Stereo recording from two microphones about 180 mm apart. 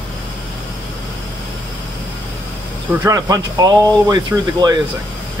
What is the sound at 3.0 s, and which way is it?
Speech, 20° right (ahead or behind).